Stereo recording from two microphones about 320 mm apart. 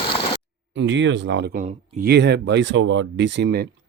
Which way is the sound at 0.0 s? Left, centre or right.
Centre.